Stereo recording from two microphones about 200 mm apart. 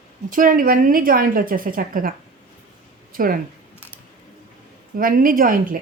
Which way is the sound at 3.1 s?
45° right (ahead or behind).